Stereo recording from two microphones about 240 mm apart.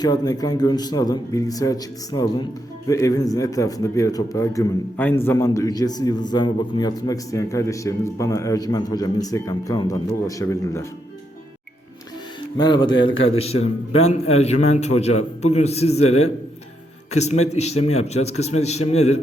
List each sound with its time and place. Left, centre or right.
0.0 s a man's voice: centre
12.5 s a man's voice: centre
16.0 s a man's voice: left
17.1 s a man's voice: left